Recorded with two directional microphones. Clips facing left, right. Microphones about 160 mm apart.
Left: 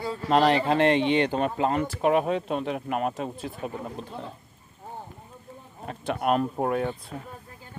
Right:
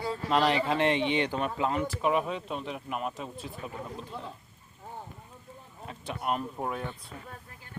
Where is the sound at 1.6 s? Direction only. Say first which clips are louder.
Left 3 dB; 50° left (ahead or behind).